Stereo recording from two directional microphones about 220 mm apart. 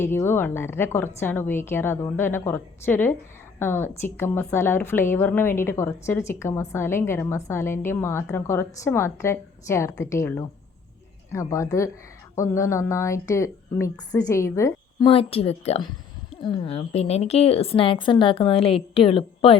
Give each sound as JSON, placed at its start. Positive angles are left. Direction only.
{"t": 0.0, "sound": "a woman's voice", "side_deg": 10}